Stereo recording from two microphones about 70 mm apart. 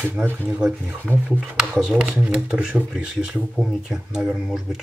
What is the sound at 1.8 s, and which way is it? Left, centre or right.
Speech, centre.